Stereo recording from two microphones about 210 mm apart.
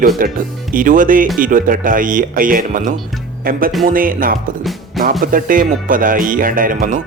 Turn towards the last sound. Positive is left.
turn(degrees=-40)  # may be behind; listen again after turning